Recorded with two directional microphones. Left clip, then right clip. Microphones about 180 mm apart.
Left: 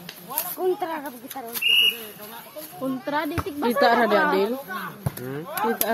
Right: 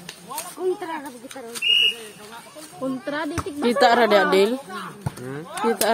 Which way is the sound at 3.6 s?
40° right (ahead or behind).